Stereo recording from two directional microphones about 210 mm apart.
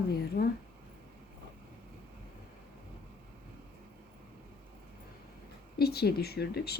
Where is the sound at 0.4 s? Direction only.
45° left (ahead or behind).